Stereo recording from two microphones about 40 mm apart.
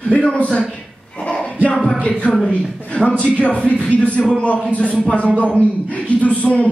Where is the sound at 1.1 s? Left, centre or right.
Left.